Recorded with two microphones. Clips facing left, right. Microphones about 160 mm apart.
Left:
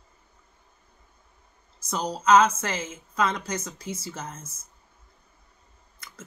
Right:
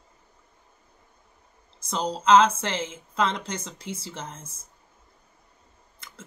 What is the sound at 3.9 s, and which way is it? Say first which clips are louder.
Speech: left 1 dB; 60° right (ahead or behind).